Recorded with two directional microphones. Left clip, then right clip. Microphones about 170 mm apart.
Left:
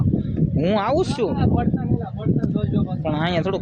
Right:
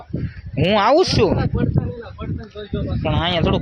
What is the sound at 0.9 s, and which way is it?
Speech, 10° right (ahead or behind).